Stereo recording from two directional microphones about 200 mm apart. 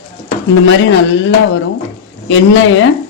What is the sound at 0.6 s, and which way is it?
Speech, 75° left (ahead or behind).